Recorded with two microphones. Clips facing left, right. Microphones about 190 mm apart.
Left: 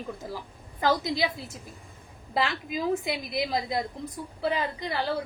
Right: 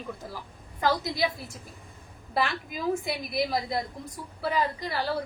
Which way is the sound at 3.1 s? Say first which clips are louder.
Even; 20° left (ahead or behind).